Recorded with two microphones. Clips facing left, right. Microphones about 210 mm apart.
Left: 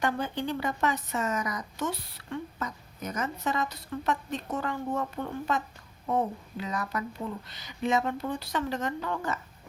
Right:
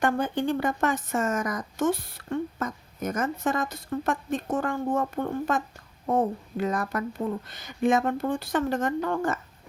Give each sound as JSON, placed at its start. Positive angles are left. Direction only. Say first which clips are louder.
{"t": 0.0, "sound": "a woman's voice", "louder": "right 5 dB", "side_deg": -50}